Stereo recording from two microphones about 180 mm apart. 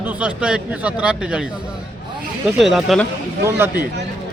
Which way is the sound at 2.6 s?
Centre (ahead or behind).